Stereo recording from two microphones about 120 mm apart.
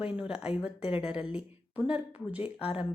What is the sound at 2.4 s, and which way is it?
Speech, 50° left (ahead or behind).